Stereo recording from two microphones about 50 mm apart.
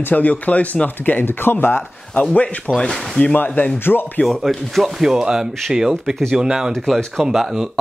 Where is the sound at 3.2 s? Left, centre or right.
Left.